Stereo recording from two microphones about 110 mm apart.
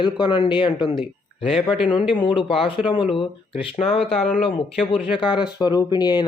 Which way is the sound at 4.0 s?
Centre (ahead or behind).